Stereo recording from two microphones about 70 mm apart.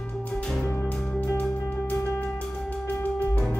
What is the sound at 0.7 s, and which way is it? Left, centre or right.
Music, left.